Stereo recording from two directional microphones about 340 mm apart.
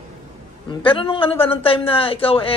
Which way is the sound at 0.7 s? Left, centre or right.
Centre.